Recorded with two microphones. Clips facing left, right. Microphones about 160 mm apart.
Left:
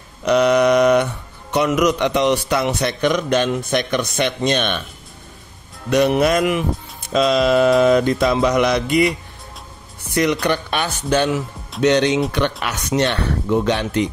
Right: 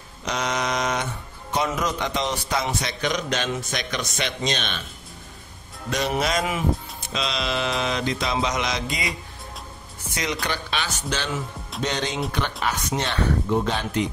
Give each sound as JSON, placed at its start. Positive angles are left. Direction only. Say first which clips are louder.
{"t": 0.2, "sound": "mantra", "louder": "left 12 dB", "side_deg": 60}
{"t": 1.5, "sound": "a man's voice", "louder": "left 8 dB", "side_deg": 75}
{"t": 5.9, "sound": "a man's voice", "louder": "left 9 dB", "side_deg": 60}
{"t": 7.1, "sound": "a man's voice", "louder": "left 12 dB", "side_deg": 50}